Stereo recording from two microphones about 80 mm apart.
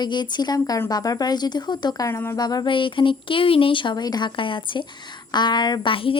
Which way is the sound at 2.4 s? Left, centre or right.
Left.